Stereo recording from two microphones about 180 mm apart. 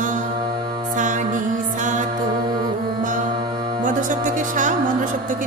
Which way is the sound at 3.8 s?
45° right (ahead or behind).